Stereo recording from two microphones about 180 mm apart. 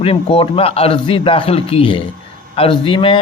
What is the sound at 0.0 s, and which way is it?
Speech, 30° left (ahead or behind).